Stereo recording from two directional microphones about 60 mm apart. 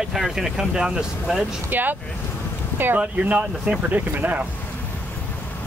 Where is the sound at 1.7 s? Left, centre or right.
Right.